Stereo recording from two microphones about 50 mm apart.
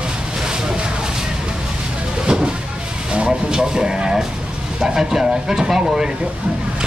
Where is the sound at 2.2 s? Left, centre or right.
Centre.